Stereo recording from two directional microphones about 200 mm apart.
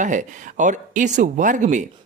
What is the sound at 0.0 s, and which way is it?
A man's voice, 40° right (ahead or behind).